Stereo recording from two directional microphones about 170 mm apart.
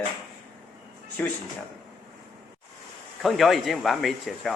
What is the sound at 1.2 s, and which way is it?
Speech, 10° left (ahead or behind).